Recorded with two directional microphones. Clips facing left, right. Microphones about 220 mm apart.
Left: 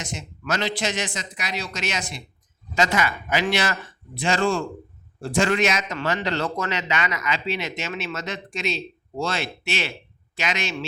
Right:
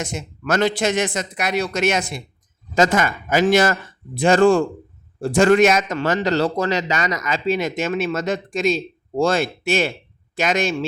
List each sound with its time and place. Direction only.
0.0 s a man's voice: 55° right (ahead or behind)